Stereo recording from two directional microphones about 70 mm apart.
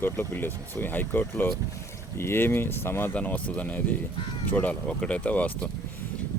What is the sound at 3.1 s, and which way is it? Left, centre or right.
Speech, left.